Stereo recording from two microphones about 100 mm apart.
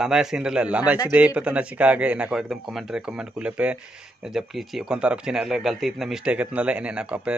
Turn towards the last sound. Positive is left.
turn(degrees=-10)  # may be behind; listen again after turning